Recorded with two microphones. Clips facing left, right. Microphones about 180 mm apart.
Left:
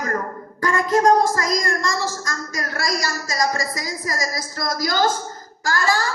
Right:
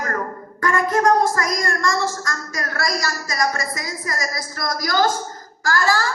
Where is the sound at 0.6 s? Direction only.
20° left (ahead or behind).